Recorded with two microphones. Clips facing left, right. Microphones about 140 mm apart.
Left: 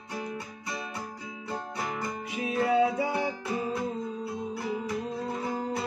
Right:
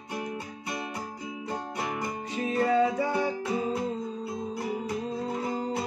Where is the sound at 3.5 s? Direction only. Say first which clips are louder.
Right 1 dB; 20° right (ahead or behind).